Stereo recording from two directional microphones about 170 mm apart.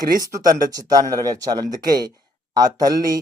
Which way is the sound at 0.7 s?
20° right (ahead or behind).